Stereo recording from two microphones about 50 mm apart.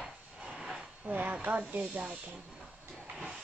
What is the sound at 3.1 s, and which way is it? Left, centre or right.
Vehicle, centre.